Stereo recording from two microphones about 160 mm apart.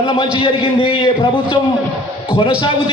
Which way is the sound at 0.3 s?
35° left (ahead or behind).